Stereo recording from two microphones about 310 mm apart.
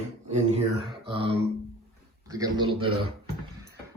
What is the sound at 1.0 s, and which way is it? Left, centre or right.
Speech, centre.